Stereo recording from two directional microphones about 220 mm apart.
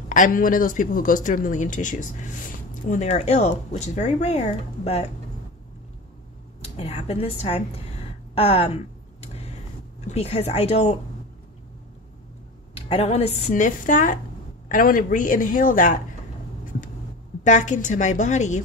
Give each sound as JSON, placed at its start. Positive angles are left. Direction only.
{"t": 0.1, "sound": "speech", "side_deg": 40}
{"t": 6.6, "sound": "a woman's voice", "side_deg": 25}
{"t": 9.2, "sound": "a sound", "side_deg": 25}
{"t": 10.0, "sound": "speech", "side_deg": 30}
{"t": 12.7, "sound": "speech", "side_deg": 25}
{"t": 17.4, "sound": "speech", "side_deg": 35}